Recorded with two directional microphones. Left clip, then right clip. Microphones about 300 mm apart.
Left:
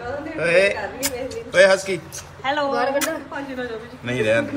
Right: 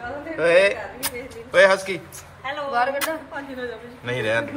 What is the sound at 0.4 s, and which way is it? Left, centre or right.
A man's voice, centre.